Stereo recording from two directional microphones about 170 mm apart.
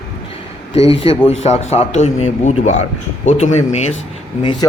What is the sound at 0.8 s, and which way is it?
Speech, 35° left (ahead or behind).